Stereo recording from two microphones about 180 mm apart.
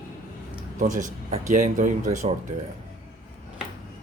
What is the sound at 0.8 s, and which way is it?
Speech, 45° right (ahead or behind).